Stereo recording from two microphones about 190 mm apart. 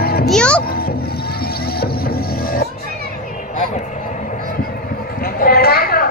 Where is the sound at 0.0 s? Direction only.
55° left (ahead or behind).